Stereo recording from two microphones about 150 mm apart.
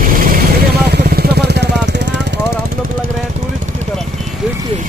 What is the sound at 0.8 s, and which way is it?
Vehicle, 90° right.